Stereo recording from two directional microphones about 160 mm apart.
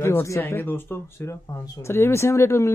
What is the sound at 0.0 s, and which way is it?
A man's voice, 15° left (ahead or behind).